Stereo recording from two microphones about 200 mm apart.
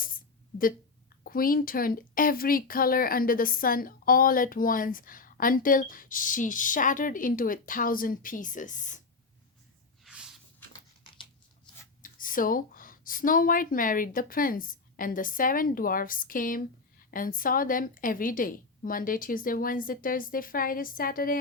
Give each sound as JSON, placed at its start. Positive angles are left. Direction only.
{"t": 1.2, "sound": "speech", "side_deg": 45}
{"t": 10.0, "sound": "spray", "side_deg": -5}
{"t": 12.0, "sound": "speech", "side_deg": 45}